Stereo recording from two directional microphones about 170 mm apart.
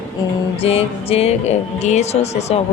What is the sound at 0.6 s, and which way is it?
Speech, 35° left (ahead or behind).